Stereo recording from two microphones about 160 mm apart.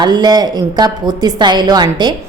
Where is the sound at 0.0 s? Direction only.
25° right (ahead or behind).